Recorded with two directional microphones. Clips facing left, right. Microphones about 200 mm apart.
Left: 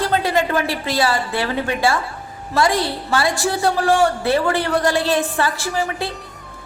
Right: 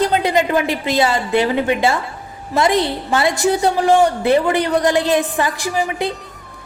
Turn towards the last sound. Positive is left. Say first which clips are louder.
# right 3 dB
turn(degrees=-15)  # may be behind; listen again after turning